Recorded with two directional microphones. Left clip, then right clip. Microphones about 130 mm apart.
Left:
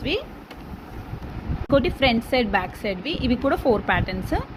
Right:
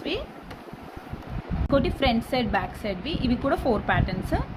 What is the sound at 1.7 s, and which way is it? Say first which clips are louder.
A woman's voice: left 4 dB; 25° left (ahead or behind).